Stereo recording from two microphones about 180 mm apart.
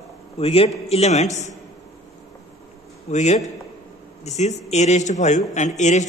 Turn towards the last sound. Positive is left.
turn(degrees=40)  # may be behind; listen again after turning